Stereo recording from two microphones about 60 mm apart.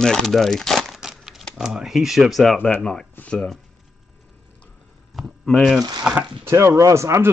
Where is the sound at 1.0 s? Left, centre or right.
Centre.